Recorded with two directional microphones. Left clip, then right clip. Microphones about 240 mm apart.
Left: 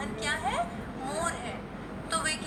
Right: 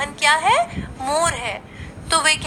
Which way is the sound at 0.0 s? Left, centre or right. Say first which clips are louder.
Right 15 dB; right.